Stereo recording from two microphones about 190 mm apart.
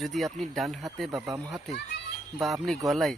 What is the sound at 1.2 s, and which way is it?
Speech, 15° right (ahead or behind).